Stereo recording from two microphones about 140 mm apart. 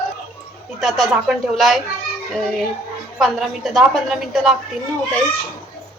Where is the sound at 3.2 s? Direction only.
Centre (ahead or behind).